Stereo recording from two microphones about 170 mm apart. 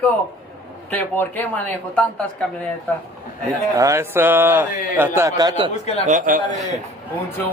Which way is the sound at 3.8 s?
15° right (ahead or behind).